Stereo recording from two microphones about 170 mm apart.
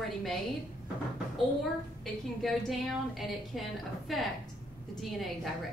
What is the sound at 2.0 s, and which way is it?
A woman's voice, centre (ahead or behind).